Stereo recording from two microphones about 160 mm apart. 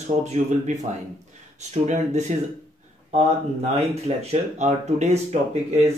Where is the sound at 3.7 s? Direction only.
40° right (ahead or behind).